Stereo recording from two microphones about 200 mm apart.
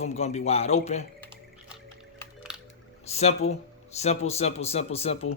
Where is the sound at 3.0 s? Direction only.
30° left (ahead or behind).